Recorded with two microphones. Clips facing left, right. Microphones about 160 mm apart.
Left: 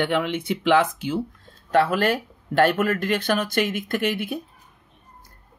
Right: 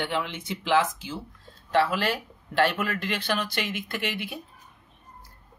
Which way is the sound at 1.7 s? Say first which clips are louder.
Left 4 dB; 50° left (ahead or behind).